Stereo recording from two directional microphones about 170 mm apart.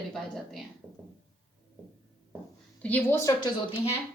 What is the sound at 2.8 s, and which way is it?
Speech, 10° left (ahead or behind).